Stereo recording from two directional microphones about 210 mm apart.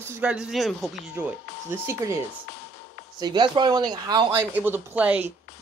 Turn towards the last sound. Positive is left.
turn(degrees=-5)  # may be behind; listen again after turning